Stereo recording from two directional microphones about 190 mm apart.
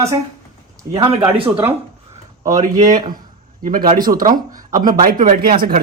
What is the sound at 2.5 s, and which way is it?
Speech, 40° right (ahead or behind).